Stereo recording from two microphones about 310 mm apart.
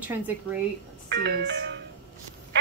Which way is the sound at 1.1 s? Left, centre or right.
Right.